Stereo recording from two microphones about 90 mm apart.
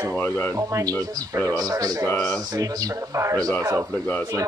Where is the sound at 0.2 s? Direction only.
20° left (ahead or behind).